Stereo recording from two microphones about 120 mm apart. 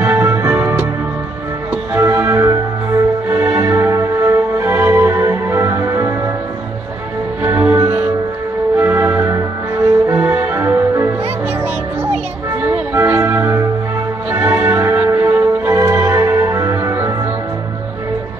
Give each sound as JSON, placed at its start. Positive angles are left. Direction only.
{"t": 0.1, "sound": "music", "side_deg": -25}
{"t": 7.4, "sound": "music", "side_deg": -15}
{"t": 12.6, "sound": "music", "side_deg": -20}